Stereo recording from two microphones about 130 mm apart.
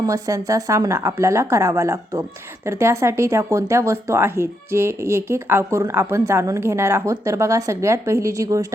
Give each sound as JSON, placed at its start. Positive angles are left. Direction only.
{"t": 0.0, "sound": "a woman's voice", "side_deg": -25}